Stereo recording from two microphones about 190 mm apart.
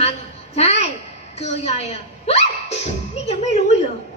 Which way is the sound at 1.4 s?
35° left (ahead or behind).